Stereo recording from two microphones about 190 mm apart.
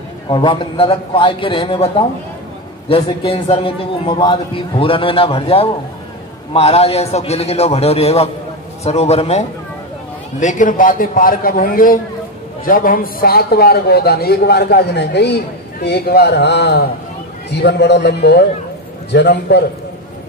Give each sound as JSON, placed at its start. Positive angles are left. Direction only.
{"t": 0.3, "sound": "a man's voice", "side_deg": 25}
{"t": 2.9, "sound": "a man's voice", "side_deg": 30}
{"t": 10.4, "sound": "a man's voice", "side_deg": 45}